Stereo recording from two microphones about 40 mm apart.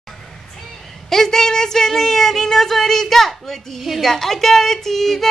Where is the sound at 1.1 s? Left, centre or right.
Centre.